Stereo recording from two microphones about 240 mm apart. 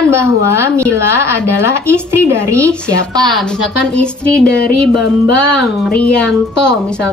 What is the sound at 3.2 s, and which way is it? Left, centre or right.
A woman's voice, centre.